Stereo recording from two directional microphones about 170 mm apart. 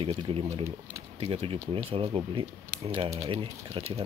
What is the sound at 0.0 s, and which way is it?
Speech, 30° right (ahead or behind).